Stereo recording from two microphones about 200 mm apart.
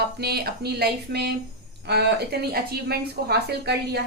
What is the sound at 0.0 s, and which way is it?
A woman's voice, 50° right (ahead or behind).